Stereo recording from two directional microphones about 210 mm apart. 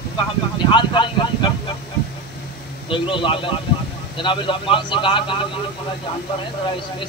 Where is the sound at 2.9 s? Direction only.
25° left (ahead or behind).